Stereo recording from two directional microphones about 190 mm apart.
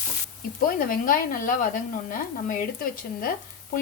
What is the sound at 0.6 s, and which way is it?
Speech, 45° left (ahead or behind).